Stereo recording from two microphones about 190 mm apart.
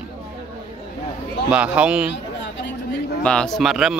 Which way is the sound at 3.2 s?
5° left (ahead or behind).